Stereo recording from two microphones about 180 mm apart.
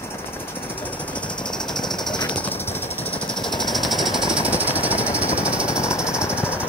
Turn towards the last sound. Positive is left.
turn(degrees=10)  # may be behind; listen again after turning